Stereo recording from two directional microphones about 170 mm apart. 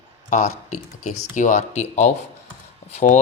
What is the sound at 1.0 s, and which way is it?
Speech, 45° left (ahead or behind).